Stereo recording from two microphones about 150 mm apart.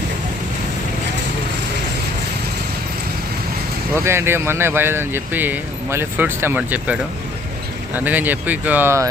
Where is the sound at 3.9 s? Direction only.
15° right (ahead or behind).